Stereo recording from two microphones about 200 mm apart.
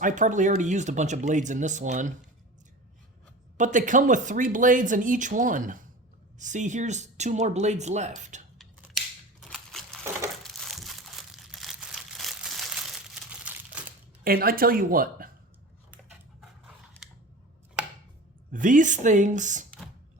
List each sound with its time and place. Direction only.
0.0 s speech: 40° right (ahead or behind)
3.6 s speech: 40° right (ahead or behind)
9.4 s a sound: centre (ahead or behind)
10.4 s crumpling: centre (ahead or behind)
14.3 s speech: 45° right (ahead or behind)
18.5 s speech: 40° right (ahead or behind)